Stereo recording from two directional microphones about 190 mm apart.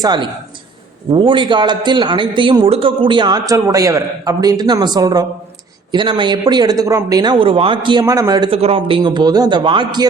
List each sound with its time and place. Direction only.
0.0 s speech: 25° right (ahead or behind)